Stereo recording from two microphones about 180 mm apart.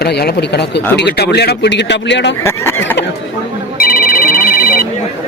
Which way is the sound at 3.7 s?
55° left (ahead or behind).